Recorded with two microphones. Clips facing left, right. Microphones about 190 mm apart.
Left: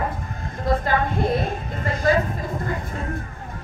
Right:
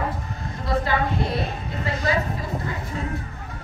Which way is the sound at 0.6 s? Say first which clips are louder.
Left 2 dB; 50° left (ahead or behind).